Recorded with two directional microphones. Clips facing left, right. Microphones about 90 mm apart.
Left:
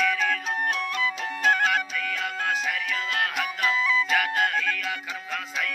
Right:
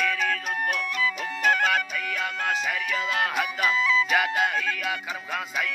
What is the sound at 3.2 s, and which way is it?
Music, 10° right (ahead or behind).